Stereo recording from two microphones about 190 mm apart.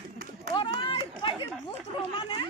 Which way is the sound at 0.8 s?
25° left (ahead or behind).